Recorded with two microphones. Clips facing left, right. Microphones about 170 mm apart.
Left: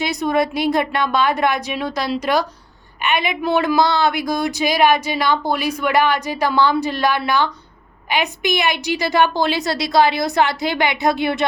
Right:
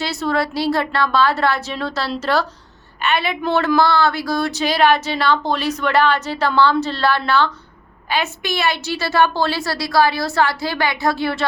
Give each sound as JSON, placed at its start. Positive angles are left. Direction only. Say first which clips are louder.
{"t": 0.0, "sound": "speech", "louder": "left 2 dB", "side_deg": 15}